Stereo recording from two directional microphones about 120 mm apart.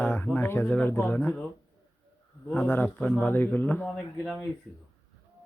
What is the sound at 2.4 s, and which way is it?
Speech, 15° left (ahead or behind).